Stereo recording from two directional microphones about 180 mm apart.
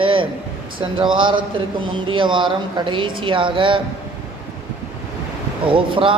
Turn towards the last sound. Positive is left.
turn(degrees=-30)  # may be behind; listen again after turning